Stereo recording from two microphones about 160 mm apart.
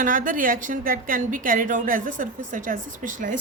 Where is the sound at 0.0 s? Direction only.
55° right (ahead or behind).